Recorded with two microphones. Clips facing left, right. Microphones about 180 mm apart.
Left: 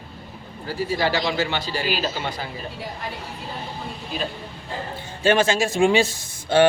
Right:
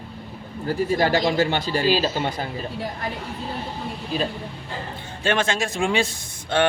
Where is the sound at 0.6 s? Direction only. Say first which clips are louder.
Right 3 dB; 50° right (ahead or behind).